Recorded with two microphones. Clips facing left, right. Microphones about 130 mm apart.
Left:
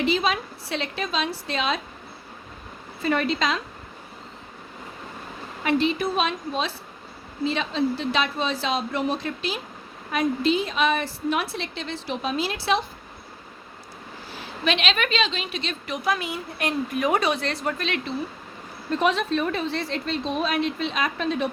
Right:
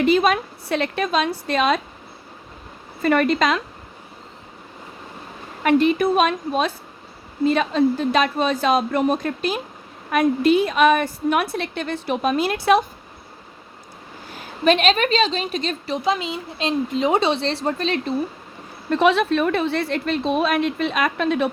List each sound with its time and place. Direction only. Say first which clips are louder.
0.0 s a woman's voice: right 6 dB; 50° right (ahead or behind)
3.0 s a woman's voice: right 6 dB; 55° right (ahead or behind)
5.6 s a woman's voice: right 6 dB; 55° right (ahead or behind)
14.6 s a woman's voice: right 7 dB; 45° right (ahead or behind)
16.0 s a woman's voice: right 2 dB; 20° right (ahead or behind)
18.9 s a woman's voice: right 5 dB; 70° right (ahead or behind)